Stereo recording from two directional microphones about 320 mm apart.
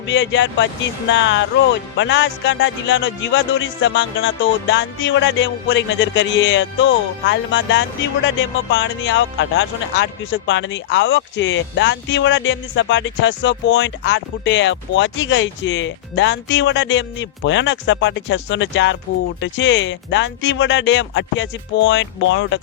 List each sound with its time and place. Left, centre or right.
0.1 s music: left